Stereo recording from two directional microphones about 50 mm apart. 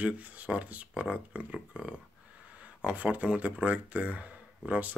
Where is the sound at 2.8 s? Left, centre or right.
Right.